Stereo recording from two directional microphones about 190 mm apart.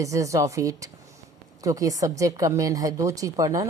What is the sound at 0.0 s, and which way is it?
A woman's voice, 15° right (ahead or behind).